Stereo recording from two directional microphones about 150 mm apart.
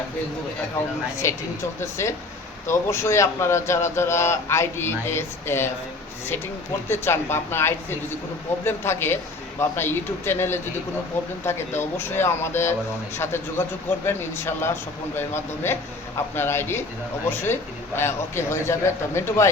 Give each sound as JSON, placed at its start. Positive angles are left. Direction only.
{"t": 1.1, "sound": "a man's voice", "side_deg": 20}
{"t": 6.8, "sound": "a man's voice", "side_deg": 15}